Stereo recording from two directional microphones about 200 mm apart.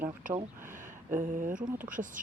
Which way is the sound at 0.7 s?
40° right (ahead or behind).